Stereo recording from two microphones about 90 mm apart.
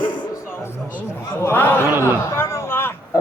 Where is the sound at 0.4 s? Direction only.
25° left (ahead or behind).